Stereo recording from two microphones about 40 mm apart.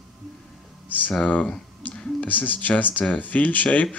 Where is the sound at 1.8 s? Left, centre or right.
Left.